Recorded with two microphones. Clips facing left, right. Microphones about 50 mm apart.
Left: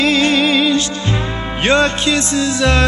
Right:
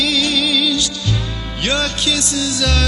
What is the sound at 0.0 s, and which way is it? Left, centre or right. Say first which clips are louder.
Music: left 5 dB; left.